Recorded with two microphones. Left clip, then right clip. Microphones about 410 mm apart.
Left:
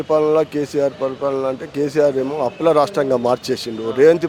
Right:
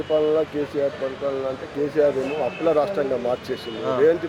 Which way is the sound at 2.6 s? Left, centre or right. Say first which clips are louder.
Left 6 dB; left.